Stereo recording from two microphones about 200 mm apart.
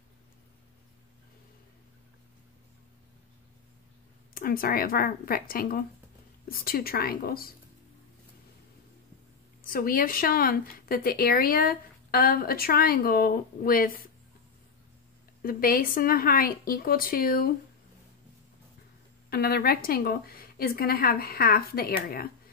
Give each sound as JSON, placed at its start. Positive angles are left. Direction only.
{"t": 4.3, "sound": "speech", "side_deg": 45}
{"t": 9.7, "sound": "speech", "side_deg": 45}
{"t": 15.4, "sound": "speech", "side_deg": 45}
{"t": 19.3, "sound": "speech", "side_deg": 50}